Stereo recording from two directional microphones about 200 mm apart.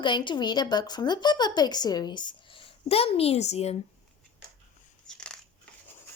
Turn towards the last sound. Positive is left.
turn(degrees=5)  # may be behind; listen again after turning